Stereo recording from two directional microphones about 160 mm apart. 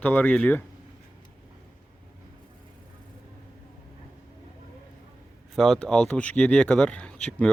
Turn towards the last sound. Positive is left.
turn(degrees=5)  # may be behind; listen again after turning